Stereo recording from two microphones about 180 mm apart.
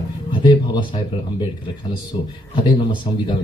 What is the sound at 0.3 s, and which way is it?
Speech, 25° left (ahead or behind).